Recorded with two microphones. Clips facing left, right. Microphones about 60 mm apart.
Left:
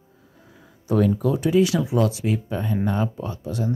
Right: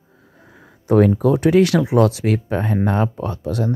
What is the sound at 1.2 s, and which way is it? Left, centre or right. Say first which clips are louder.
Speech: right 5 dB; right.